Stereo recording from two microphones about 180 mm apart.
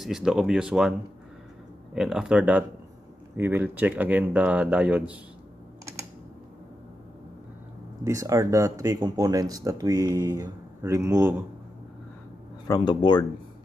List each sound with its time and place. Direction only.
0.0 s speech: centre (ahead or behind)
2.0 s speech: 5° right (ahead or behind)
8.0 s speech: 15° right (ahead or behind)
12.6 s speech: 20° left (ahead or behind)